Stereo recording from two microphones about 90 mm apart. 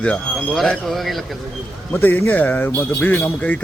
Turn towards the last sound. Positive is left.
turn(degrees=20)  # may be behind; listen again after turning